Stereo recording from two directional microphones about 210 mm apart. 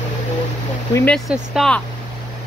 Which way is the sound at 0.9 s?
10° left (ahead or behind).